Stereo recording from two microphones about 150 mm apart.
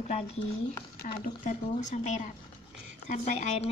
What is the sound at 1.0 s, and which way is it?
Speech, 60° left (ahead or behind).